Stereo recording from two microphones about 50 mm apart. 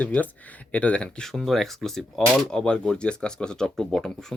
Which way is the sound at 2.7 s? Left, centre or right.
Centre.